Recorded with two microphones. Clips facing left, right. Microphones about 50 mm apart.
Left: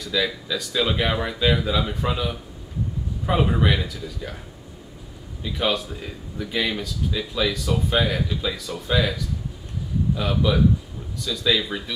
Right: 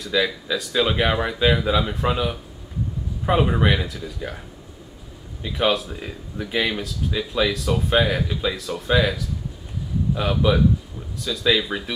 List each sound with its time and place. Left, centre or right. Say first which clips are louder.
0.1 s speech: right 2 dB; centre
0.5 s speech: right 2 dB; centre
5.4 s speech: right 3 dB; centre
10.4 s speech: right 1 dB; centre